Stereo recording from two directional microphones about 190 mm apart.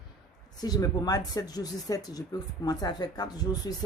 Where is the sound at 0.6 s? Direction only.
20° left (ahead or behind).